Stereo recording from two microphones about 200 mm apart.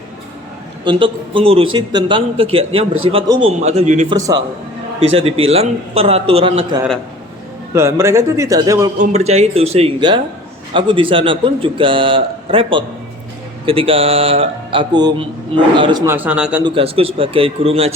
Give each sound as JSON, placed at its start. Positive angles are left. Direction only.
{"t": 0.9, "sound": "a man's voice", "side_deg": -25}
{"t": 7.7, "sound": "a man's voice", "side_deg": -15}
{"t": 9.0, "sound": "a man's voice", "side_deg": -35}
{"t": 16.0, "sound": "a man's voice", "side_deg": -10}
{"t": 16.6, "sound": "a man's voice", "side_deg": -25}